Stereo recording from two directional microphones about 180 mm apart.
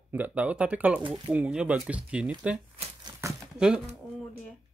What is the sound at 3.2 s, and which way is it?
Crumpling, 15° right (ahead or behind).